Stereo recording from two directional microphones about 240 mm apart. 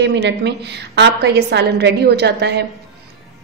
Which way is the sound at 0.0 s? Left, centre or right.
Right.